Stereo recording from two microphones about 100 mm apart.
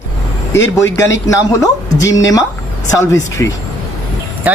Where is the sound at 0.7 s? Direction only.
30° left (ahead or behind).